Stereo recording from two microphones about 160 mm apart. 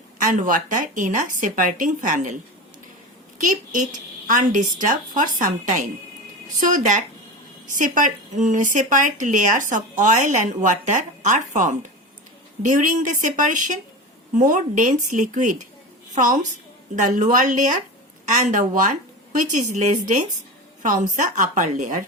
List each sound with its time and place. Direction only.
0.2 s a woman's voice: 55° right (ahead or behind)